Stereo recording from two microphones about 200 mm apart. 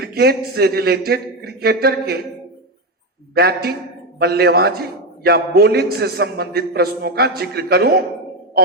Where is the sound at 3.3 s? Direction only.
50° right (ahead or behind).